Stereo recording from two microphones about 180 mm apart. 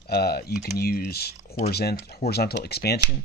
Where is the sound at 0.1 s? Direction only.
60° left (ahead or behind).